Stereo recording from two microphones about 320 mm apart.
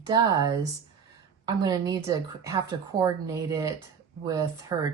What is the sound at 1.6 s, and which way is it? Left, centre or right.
Speech, centre.